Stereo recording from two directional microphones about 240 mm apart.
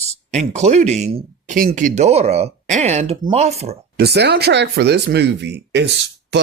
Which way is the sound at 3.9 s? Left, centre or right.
Right.